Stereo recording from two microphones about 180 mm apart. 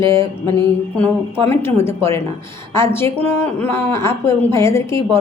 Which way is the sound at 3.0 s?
15° left (ahead or behind).